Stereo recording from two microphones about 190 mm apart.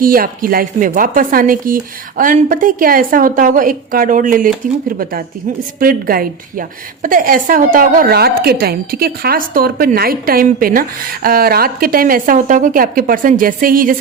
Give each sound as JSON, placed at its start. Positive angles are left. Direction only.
{"t": 0.0, "sound": "a woman's voice", "side_deg": -50}
{"t": 5.8, "sound": "a woman's voice", "side_deg": -50}